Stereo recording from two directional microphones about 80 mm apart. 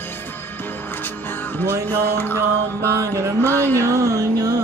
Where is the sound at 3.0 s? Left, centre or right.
Right.